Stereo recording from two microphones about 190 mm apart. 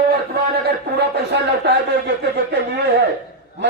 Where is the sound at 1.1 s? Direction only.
60° right (ahead or behind).